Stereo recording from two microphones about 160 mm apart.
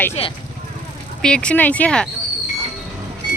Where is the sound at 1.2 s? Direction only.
5° left (ahead or behind).